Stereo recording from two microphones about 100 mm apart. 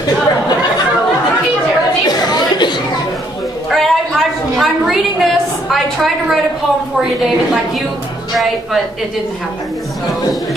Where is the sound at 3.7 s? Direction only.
Centre (ahead or behind).